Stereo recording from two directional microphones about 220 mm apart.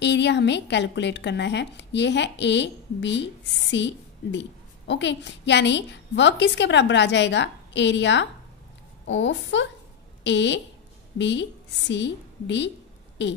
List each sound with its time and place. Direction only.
0.0 s a woman's voice: 50° left (ahead or behind)